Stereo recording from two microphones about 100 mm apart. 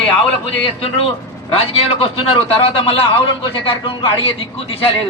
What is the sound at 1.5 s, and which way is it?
A woman's voice, 75° left (ahead or behind).